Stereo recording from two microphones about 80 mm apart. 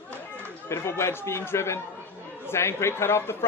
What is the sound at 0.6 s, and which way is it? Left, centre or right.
Speech, left.